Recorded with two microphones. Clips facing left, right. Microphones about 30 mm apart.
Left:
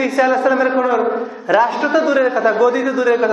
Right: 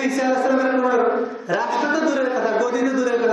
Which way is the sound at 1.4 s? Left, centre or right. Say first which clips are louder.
Left 8 dB; left.